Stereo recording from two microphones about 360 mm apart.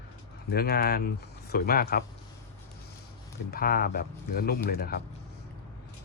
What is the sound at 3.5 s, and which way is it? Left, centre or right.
Speech, left.